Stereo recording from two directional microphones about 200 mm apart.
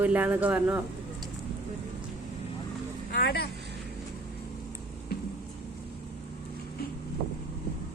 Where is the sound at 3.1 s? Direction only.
50° left (ahead or behind).